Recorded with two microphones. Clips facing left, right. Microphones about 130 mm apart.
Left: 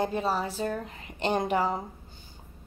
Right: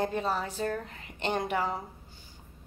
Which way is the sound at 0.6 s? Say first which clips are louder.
Left 1 dB; 15° left (ahead or behind).